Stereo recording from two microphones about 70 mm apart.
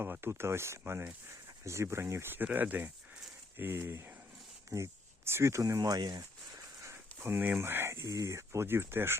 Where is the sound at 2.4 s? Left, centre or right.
Right.